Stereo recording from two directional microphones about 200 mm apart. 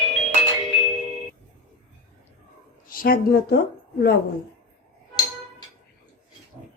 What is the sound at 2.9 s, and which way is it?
Speech, 45° left (ahead or behind).